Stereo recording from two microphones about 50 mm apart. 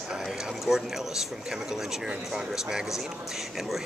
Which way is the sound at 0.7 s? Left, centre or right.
Centre.